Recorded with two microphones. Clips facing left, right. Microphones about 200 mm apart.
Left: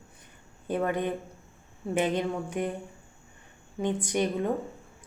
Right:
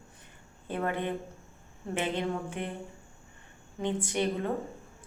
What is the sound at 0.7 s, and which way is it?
A woman's voice, 15° left (ahead or behind).